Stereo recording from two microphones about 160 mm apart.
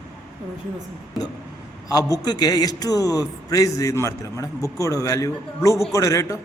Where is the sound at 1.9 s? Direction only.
25° left (ahead or behind).